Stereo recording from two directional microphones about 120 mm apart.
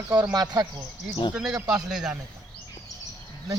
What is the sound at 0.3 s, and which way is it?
Speech, 35° right (ahead or behind).